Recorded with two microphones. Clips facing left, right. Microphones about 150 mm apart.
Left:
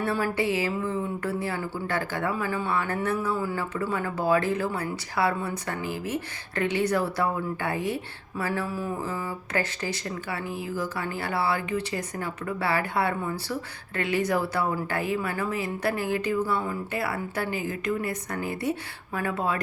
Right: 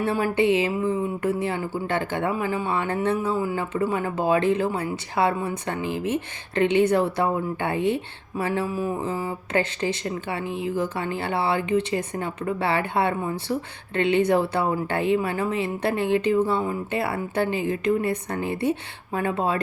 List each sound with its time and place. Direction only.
0.0 s a woman's voice: 20° right (ahead or behind)